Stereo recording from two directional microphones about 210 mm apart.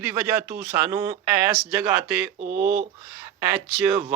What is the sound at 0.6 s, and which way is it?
Speech, 10° right (ahead or behind).